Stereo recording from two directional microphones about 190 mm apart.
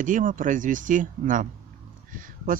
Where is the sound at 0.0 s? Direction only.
45° right (ahead or behind).